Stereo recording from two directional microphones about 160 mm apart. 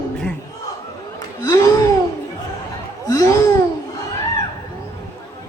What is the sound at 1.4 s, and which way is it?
Speech, 20° left (ahead or behind).